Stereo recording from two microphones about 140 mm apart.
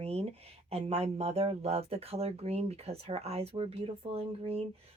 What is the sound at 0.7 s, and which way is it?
Speech, 45° right (ahead or behind).